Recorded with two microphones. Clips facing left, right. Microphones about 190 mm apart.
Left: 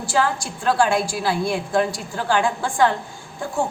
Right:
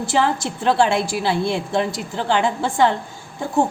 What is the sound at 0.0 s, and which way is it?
A woman's voice, 20° right (ahead or behind).